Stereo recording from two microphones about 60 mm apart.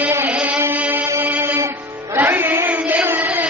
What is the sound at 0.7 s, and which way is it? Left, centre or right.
Music, right.